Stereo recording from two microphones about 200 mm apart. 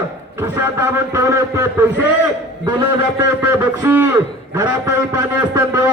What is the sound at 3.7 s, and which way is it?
A man's voice, 10° right (ahead or behind).